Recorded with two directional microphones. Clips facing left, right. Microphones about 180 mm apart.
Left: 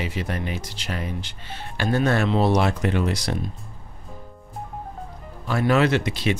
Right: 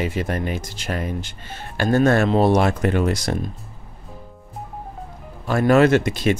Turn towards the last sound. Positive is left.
turn(degrees=-45)  # may be behind; listen again after turning